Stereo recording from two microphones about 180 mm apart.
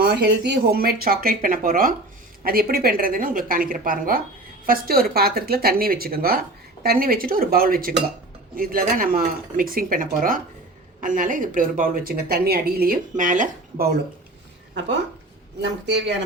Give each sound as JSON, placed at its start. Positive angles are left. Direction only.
{"t": 0.0, "sound": "speech", "side_deg": -65}
{"t": 15.6, "sound": "a man's voice", "side_deg": -70}